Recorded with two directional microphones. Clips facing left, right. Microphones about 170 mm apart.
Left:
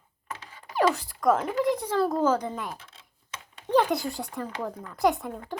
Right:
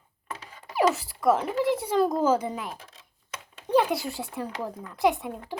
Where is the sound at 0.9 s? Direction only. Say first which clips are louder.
Even; 5° right (ahead or behind).